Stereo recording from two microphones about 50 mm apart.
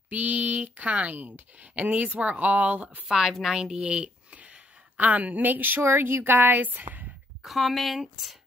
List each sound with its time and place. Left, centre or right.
0.1 s speech: right
3.1 s a woman's voice: centre
3.8 s speech: right
5.8 s a woman's voice: right
7.4 s a woman's voice: centre